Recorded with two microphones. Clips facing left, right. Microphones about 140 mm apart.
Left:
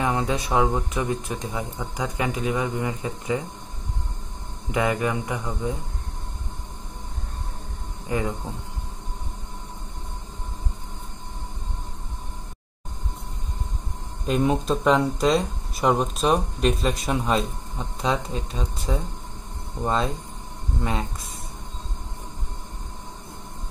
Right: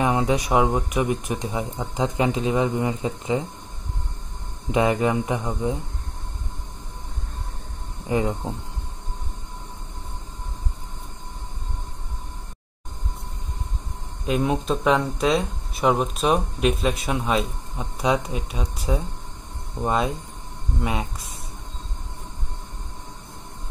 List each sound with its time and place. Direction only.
0.0 s speech: 20° right (ahead or behind)
4.6 s speech: 25° right (ahead or behind)
8.1 s speech: 20° right (ahead or behind)
14.2 s speech: 5° right (ahead or behind)